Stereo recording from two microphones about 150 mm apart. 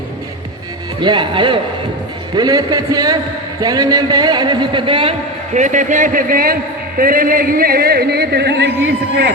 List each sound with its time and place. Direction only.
1.0 s speech: 30° right (ahead or behind)
5.5 s a man's voice: 55° right (ahead or behind); by 8.6 s 90° right